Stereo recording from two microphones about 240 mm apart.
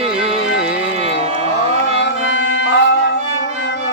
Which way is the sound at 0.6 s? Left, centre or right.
Centre.